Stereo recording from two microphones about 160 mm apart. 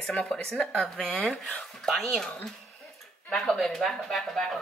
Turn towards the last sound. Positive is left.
turn(degrees=5)  # may be behind; listen again after turning